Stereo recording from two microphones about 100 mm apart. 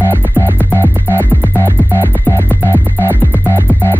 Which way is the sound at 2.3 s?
20° left (ahead or behind).